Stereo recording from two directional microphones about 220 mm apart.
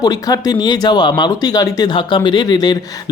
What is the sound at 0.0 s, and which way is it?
Speech, 15° left (ahead or behind).